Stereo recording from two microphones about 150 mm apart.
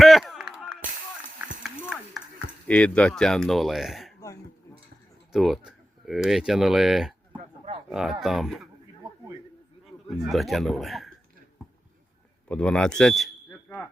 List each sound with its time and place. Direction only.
0.0 s a sound: centre (ahead or behind)
2.6 s speech: 10° left (ahead or behind)
5.3 s speech: centre (ahead or behind)
7.3 s a sound: 35° right (ahead or behind)
7.9 s speech: centre (ahead or behind)
9.0 s a sound: 20° right (ahead or behind)
10.1 s speech: centre (ahead or behind)
12.5 s speech: 5° left (ahead or behind)
13.5 s smoke detector: 10° left (ahead or behind)